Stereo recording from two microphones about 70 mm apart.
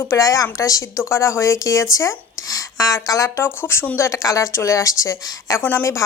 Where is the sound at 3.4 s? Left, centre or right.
Left.